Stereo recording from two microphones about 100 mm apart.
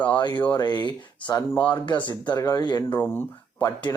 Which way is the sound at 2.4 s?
40° left (ahead or behind).